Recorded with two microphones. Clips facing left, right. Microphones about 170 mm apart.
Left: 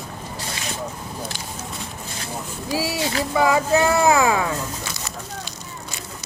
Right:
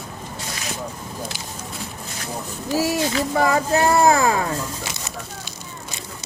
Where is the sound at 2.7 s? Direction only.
45° right (ahead or behind).